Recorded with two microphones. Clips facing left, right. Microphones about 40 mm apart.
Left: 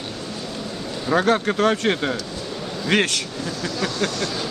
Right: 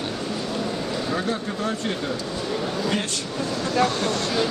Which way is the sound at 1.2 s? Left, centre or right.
Left.